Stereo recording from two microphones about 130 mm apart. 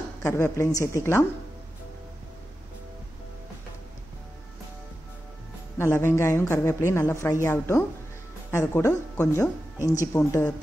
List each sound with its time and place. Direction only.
0.2 s speech: 20° left (ahead or behind)
5.8 s speech: 20° left (ahead or behind)